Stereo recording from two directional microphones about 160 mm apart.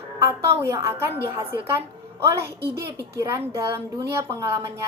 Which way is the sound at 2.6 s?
90° right.